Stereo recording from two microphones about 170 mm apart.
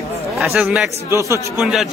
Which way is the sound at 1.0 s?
15° right (ahead or behind).